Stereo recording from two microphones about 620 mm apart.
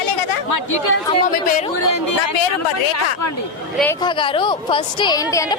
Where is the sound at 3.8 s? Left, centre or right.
Centre.